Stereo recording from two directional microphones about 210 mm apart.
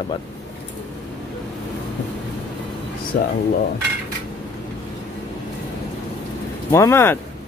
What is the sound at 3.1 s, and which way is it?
Speech, 40° left (ahead or behind).